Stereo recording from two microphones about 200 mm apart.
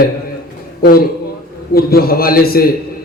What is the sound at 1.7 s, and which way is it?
Speech, 50° left (ahead or behind).